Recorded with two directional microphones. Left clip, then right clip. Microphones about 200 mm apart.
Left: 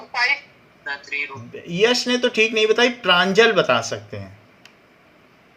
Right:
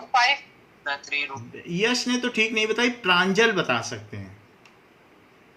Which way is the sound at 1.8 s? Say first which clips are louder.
Left 6 dB; 35° left (ahead or behind).